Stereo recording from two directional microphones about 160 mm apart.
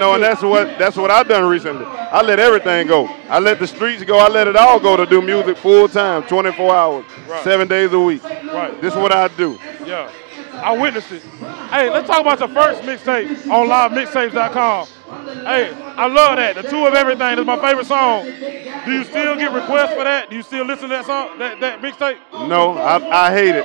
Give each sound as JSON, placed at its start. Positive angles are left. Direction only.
{"t": 0.0, "sound": "speech", "side_deg": -15}